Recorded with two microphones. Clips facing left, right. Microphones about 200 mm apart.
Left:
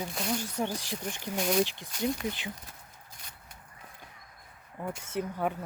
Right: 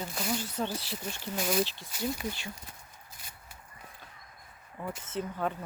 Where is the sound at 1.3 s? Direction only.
Centre (ahead or behind).